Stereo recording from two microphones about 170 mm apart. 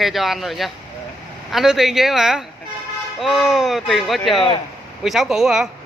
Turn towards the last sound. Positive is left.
turn(degrees=-5)  # may be behind; listen again after turning